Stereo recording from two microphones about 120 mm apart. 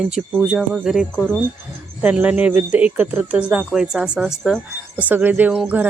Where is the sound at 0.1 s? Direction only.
5° right (ahead or behind).